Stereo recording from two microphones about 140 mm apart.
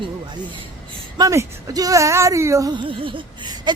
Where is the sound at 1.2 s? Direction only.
25° right (ahead or behind).